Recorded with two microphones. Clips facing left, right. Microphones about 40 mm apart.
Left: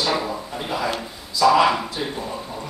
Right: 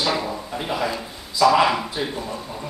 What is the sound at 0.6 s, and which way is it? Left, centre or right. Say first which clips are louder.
Speech: even; centre.